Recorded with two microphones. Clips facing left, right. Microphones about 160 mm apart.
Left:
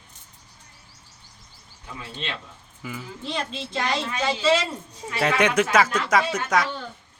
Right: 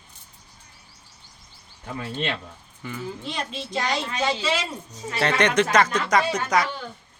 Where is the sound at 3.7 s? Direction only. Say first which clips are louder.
Even; 5° right (ahead or behind).